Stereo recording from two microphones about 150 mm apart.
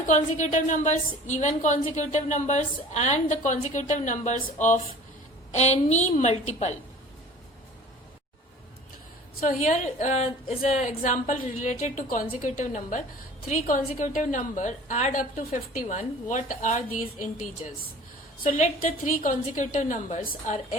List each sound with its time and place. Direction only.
0.0 s a woman's voice: 55° left (ahead or behind)
5.5 s a woman's voice: 45° left (ahead or behind)
9.5 s a woman's voice: 55° left (ahead or behind)
18.4 s a woman's voice: 60° left (ahead or behind)
20.2 s a woman's voice: 65° left (ahead or behind)